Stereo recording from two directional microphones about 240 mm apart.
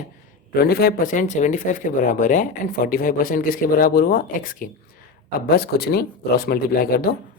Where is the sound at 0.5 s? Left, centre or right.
Left.